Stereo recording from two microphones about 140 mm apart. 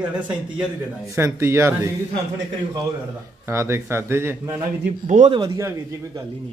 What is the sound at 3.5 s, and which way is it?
Speech, 20° right (ahead or behind).